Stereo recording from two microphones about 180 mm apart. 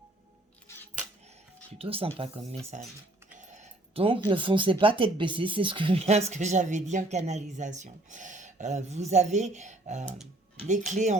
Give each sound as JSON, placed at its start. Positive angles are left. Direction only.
{"t": 1.8, "sound": "speech", "side_deg": -30}
{"t": 2.7, "sound": "speech", "side_deg": -45}